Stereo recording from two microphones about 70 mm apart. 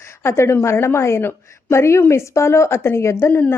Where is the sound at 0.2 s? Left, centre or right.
Left.